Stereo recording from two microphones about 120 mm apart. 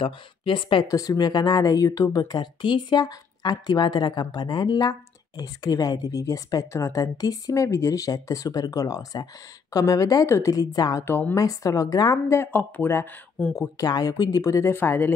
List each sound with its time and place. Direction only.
0.0 s speech: 45° left (ahead or behind)
0.8 s speech: 30° left (ahead or behind)
11.1 s a woman's voice: 15° left (ahead or behind)
11.3 s speech: 30° left (ahead or behind)
13.7 s speech: 30° left (ahead or behind)